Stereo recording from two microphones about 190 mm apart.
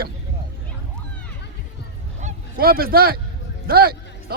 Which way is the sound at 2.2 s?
50° right (ahead or behind).